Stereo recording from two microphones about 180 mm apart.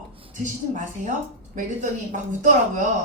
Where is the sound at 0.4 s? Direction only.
45° right (ahead or behind).